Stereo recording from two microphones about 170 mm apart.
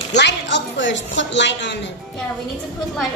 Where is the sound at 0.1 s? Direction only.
90° left.